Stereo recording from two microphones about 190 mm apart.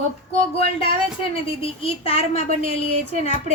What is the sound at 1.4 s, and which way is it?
Speech, 30° left (ahead or behind).